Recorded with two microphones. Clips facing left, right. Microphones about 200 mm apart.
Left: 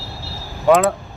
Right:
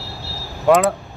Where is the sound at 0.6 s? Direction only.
Centre (ahead or behind).